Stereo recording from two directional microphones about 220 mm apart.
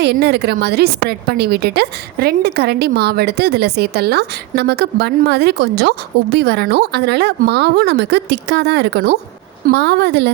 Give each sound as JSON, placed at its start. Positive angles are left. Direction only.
{"t": 0.0, "sound": "a woman's voice", "side_deg": -50}